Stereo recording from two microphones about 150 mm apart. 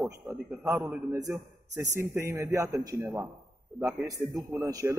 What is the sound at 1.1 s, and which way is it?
A man's voice, 20° right (ahead or behind).